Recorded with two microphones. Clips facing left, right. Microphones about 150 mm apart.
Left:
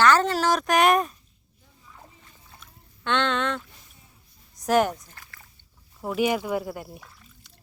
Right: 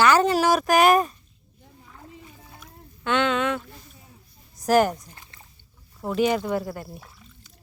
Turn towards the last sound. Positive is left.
turn(degrees=10)  # may be behind; listen again after turning